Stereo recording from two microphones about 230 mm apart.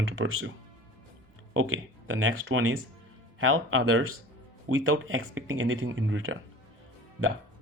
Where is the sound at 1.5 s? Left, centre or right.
Right.